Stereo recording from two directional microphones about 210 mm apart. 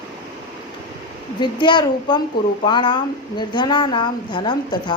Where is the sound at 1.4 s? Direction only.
20° left (ahead or behind).